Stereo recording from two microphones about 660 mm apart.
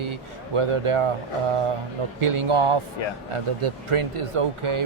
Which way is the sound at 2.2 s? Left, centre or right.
Right.